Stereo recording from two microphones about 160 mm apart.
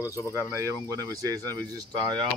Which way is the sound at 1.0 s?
20° right (ahead or behind).